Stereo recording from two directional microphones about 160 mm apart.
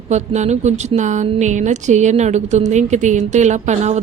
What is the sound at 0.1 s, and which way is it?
A woman's voice, 45° right (ahead or behind).